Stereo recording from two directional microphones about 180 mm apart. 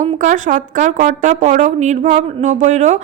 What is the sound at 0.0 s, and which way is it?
A woman's voice, 45° right (ahead or behind).